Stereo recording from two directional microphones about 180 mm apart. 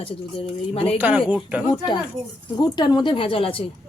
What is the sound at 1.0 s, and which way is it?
Speech, 10° right (ahead or behind).